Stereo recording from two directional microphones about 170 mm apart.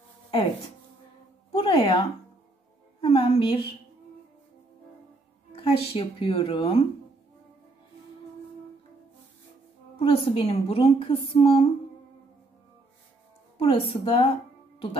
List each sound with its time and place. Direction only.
1.5 s a sound: 30° left (ahead or behind)
3.0 s a woman's voice: 35° left (ahead or behind)
5.6 s a woman's voice: 30° left (ahead or behind)
9.9 s a woman's voice: 35° left (ahead or behind)
13.6 s a woman's voice: 35° left (ahead or behind)